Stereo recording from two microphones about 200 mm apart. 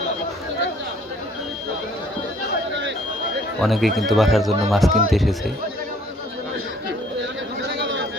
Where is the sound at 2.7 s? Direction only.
65° right (ahead or behind).